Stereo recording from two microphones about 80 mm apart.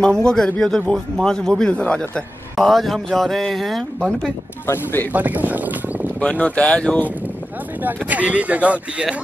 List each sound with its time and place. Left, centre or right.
0.0 s a man's voice: centre
2.5 s speech: centre
5.1 s speech: right
6.1 s a man's voice: centre
7.8 s speech: centre